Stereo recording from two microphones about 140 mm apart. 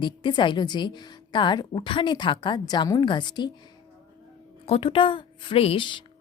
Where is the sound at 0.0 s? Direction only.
35° left (ahead or behind).